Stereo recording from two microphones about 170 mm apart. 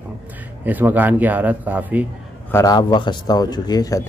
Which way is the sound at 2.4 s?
20° left (ahead or behind).